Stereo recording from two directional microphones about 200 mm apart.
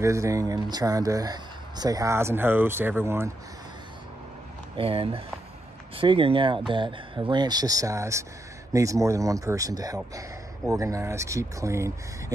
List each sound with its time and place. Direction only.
0.0 s speech: 15° right (ahead or behind)
4.7 s speech: 25° right (ahead or behind)